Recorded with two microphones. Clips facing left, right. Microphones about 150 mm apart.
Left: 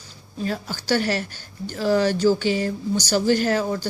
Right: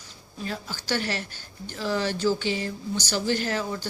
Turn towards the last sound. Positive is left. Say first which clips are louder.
# left 7 dB
turn(degrees=45)  # may be behind; listen again after turning